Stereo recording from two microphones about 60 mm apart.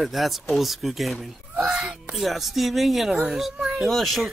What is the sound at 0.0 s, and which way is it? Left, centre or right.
Speech, centre.